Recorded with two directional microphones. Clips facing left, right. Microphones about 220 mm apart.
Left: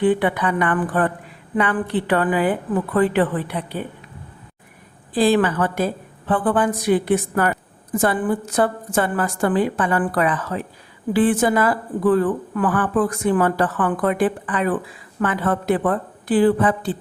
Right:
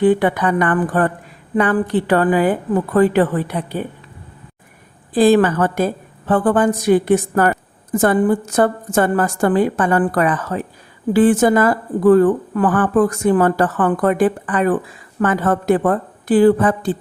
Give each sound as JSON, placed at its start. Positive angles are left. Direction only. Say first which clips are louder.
{"t": 0.0, "sound": "a woman's voice", "louder": "right 4 dB", "side_deg": -45}
{"t": 5.1, "sound": "a woman's voice", "louder": "right 5 dB", "side_deg": -45}